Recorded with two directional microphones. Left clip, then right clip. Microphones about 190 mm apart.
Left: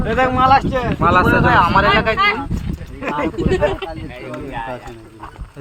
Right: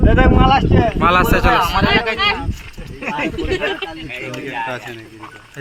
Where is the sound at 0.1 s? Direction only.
50° right (ahead or behind).